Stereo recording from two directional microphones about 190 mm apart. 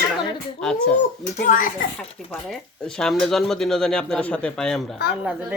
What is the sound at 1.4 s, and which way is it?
Speech, 45° left (ahead or behind).